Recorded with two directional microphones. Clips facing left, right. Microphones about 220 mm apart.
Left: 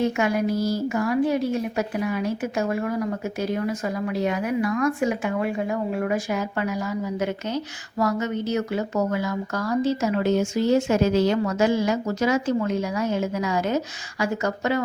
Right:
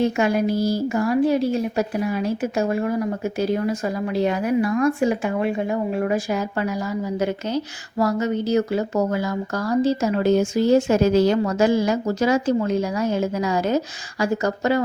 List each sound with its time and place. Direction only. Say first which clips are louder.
0.0 s a woman's voice: right 3 dB; 30° right (ahead or behind)